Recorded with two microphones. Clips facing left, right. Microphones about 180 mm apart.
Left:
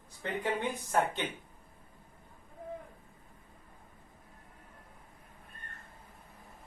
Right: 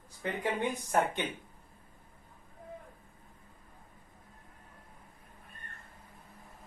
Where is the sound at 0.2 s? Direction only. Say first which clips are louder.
Right 1 dB; 15° right (ahead or behind).